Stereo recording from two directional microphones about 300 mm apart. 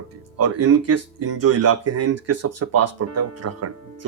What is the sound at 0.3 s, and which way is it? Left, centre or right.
Speech, right.